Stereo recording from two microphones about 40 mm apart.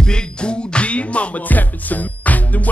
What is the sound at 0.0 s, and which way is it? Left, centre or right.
Music, left.